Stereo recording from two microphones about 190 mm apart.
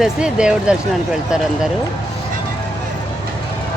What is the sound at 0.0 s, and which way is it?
Speech, 5° right (ahead or behind).